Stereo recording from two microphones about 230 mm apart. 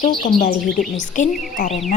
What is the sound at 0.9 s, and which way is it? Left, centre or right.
Speech, left.